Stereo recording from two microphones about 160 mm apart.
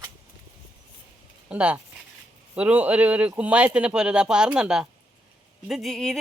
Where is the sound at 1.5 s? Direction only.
10° right (ahead or behind).